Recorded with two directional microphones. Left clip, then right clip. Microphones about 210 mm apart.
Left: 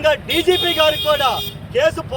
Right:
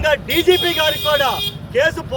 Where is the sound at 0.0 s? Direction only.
Centre (ahead or behind).